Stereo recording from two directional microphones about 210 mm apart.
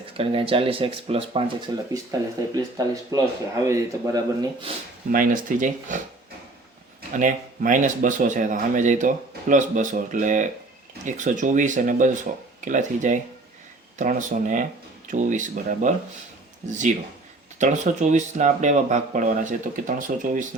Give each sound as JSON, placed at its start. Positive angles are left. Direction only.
{"t": 0.2, "sound": "speech", "side_deg": -25}
{"t": 5.1, "sound": "speech", "side_deg": -40}
{"t": 7.2, "sound": "speech", "side_deg": -40}